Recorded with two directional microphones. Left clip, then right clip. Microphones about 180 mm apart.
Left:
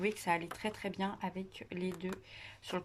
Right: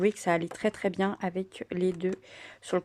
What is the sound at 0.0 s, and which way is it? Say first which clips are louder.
Speech: right 8 dB; 40° right (ahead or behind).